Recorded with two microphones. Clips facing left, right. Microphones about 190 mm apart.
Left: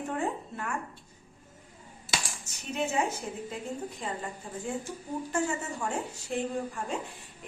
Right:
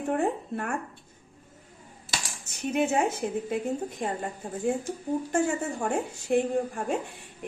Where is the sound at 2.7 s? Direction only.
55° right (ahead or behind).